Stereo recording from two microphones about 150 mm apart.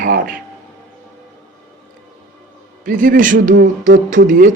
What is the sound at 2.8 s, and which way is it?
Speech, 65° right (ahead or behind).